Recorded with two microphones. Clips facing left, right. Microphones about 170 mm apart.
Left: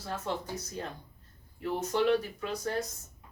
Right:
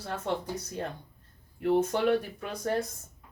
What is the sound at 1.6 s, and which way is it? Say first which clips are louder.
Speech: right 4 dB; 60° right (ahead or behind).